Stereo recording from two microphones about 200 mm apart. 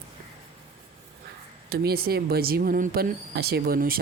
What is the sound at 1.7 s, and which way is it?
Speech, 50° right (ahead or behind).